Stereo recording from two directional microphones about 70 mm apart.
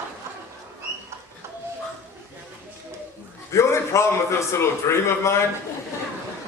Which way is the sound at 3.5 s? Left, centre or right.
Left.